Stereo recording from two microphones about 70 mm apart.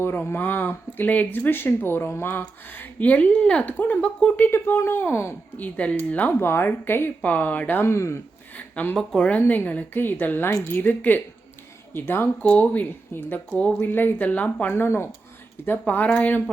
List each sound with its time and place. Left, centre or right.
0.0 s speech: left
4.0 s speech: centre
4.4 s speech: left
5.5 s speech: left
6.4 s speech: left
7.2 s speech: left
7.9 s speech: left
8.5 s a sound: left
9.0 s speech: centre
9.5 s speech: left
12.5 s speech: left
13.8 s speech: left
14.7 s speech: left
16.1 s speech: left